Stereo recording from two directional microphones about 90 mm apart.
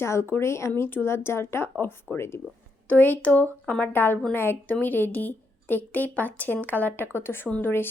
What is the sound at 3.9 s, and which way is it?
A woman's voice, 25° left (ahead or behind).